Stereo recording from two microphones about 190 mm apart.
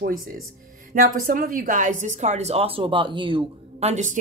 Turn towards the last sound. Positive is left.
turn(degrees=-40)  # may be behind; listen again after turning